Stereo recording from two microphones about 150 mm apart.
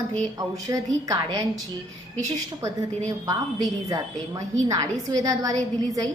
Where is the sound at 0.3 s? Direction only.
25° right (ahead or behind).